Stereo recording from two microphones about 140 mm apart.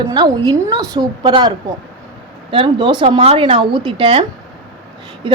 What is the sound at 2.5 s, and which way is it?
Speech, 35° right (ahead or behind).